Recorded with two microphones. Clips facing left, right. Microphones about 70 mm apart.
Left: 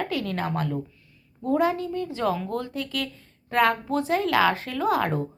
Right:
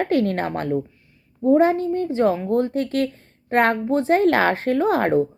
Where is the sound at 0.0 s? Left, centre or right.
Right.